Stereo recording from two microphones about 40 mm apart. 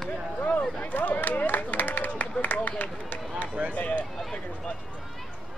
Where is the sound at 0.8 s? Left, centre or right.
Left.